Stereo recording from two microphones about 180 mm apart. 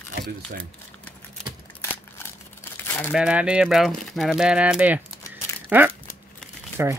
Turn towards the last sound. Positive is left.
turn(degrees=-10)  # may be behind; listen again after turning